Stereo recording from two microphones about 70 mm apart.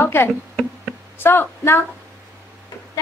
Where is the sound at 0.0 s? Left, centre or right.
Left.